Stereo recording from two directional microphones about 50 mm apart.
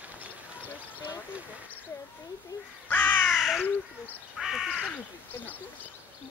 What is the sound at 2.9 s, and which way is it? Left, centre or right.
Crow, left.